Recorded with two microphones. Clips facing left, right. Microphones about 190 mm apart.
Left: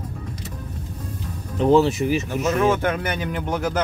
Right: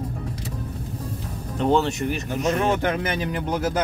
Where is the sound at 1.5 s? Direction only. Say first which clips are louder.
Left 4 dB; centre (ahead or behind).